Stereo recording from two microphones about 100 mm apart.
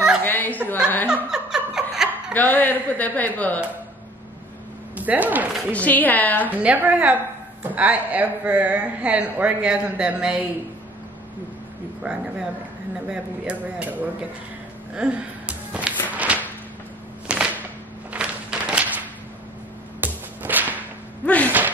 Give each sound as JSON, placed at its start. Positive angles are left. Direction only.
{"t": 0.2, "sound": "chuckle", "side_deg": 20}
{"t": 1.0, "sound": "laughter", "side_deg": -10}
{"t": 2.3, "sound": "a woman's voice", "side_deg": 15}
{"t": 4.9, "sound": "speech", "side_deg": -15}
{"t": 5.7, "sound": "a woman's voice", "side_deg": 15}
{"t": 6.5, "sound": "speech", "side_deg": -15}
{"t": 12.0, "sound": "speech", "side_deg": -10}
{"t": 15.0, "sound": "a sound", "side_deg": -10}
{"t": 20.0, "sound": "music", "side_deg": -20}
{"t": 21.5, "sound": "a sound", "side_deg": -20}